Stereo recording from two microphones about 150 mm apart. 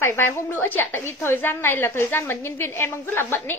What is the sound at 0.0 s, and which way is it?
A woman's voice, 15° left (ahead or behind).